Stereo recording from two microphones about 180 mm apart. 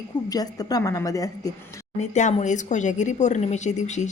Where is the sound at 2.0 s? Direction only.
40° left (ahead or behind).